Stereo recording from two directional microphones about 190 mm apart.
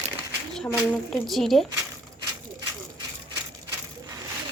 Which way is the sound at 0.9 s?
Centre (ahead or behind).